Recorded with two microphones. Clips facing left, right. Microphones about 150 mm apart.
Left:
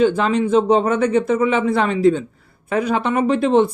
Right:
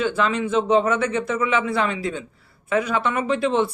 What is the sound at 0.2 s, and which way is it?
Speech, 40° left (ahead or behind).